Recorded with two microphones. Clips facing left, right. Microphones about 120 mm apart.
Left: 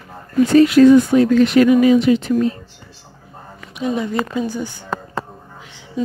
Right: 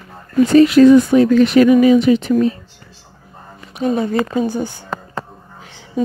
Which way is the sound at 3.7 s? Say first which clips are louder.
Right 3 dB; 40° right (ahead or behind).